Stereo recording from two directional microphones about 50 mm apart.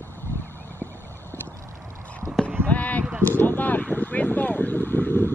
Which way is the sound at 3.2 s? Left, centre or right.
Left.